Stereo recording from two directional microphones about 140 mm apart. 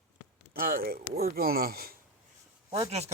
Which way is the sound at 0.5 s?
90° right.